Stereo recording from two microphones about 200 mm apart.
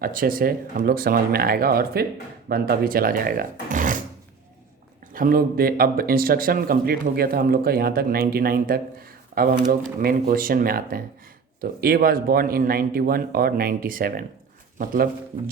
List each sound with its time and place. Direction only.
0.0 s speech: 45° right (ahead or behind)
5.1 s speech: 45° right (ahead or behind)